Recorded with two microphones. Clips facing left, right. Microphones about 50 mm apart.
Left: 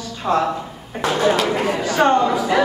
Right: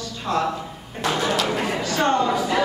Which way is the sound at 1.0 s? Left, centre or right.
Left.